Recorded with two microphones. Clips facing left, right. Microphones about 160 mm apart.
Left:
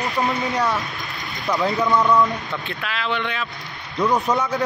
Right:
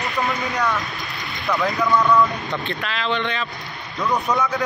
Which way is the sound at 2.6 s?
5° left (ahead or behind).